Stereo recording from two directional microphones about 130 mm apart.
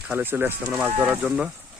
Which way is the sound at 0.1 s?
15° right (ahead or behind).